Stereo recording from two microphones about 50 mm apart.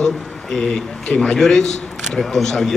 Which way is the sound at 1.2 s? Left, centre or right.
Centre.